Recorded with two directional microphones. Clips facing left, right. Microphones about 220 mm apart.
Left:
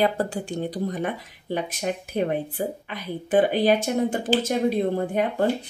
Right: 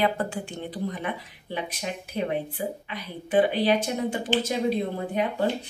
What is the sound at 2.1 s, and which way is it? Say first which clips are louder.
A woman's voice: left 2 dB; 50° left (ahead or behind).